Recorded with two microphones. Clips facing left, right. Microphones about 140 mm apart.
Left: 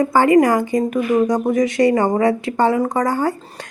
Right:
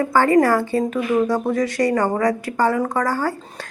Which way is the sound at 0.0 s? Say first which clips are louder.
Left 2 dB; 15° left (ahead or behind).